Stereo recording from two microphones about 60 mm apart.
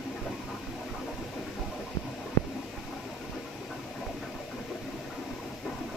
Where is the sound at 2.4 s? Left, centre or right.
Left.